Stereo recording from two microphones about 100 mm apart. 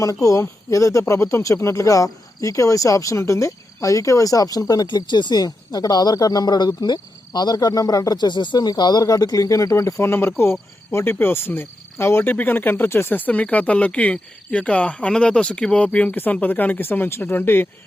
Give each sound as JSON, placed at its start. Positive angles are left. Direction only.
{"t": 0.0, "sound": "speech", "side_deg": 35}